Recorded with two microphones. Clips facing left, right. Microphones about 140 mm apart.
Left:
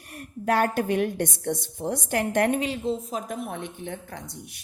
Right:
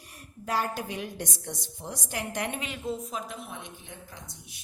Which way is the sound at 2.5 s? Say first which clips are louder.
Left 8 dB; 35° left (ahead or behind).